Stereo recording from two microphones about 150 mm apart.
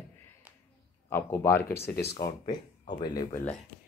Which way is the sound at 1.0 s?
15° left (ahead or behind).